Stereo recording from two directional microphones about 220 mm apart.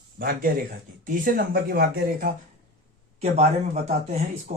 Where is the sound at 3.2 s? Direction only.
30° right (ahead or behind).